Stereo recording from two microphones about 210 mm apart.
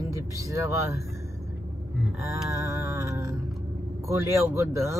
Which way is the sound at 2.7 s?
15° right (ahead or behind).